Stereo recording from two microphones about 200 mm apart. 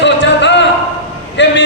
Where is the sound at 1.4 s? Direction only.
65° left (ahead or behind).